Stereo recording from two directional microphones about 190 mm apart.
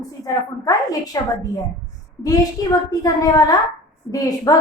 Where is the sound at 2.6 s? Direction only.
20° left (ahead or behind).